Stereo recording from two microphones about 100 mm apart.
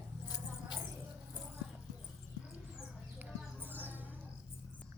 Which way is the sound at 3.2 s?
20° right (ahead or behind).